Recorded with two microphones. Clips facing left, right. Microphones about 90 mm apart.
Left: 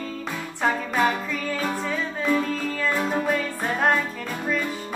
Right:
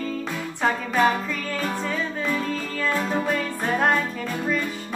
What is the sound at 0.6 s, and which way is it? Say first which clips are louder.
Music: right 1 dB; 5° left (ahead or behind).